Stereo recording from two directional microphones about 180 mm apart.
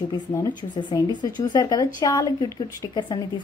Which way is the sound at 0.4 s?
25° left (ahead or behind).